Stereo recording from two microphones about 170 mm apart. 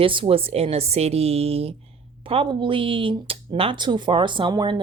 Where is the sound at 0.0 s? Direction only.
30° right (ahead or behind).